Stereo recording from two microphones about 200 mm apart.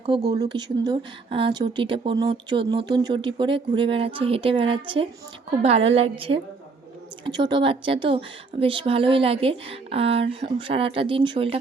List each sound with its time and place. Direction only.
0.3 s speech: 20° right (ahead or behind)